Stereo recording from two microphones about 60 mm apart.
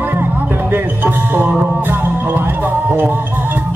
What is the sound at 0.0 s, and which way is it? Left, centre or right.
Music, right.